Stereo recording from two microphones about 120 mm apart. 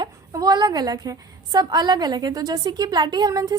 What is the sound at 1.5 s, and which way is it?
A woman's voice, 35° right (ahead or behind).